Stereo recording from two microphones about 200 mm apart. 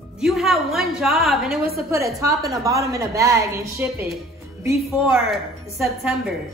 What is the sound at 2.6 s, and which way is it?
A woman's voice, 15° right (ahead or behind).